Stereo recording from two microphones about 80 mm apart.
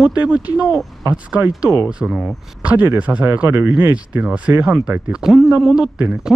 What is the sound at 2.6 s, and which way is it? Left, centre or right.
Speech, right.